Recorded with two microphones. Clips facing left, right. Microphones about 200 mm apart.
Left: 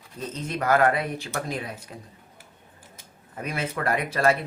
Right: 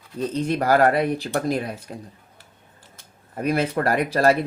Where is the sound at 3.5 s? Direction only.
35° right (ahead or behind).